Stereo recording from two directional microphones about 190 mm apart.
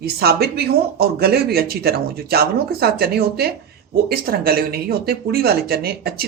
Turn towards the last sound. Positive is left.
turn(degrees=-55)  # may be behind; listen again after turning